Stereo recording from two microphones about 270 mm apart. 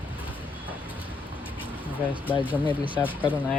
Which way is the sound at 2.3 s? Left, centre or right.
Centre.